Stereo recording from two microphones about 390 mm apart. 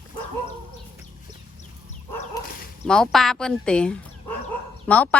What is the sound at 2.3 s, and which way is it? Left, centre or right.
Bow-wow, centre.